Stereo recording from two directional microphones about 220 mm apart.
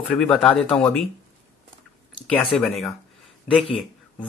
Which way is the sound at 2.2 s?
Centre (ahead or behind).